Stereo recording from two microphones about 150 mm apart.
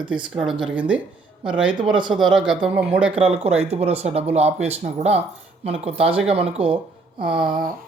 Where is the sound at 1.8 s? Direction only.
30° right (ahead or behind).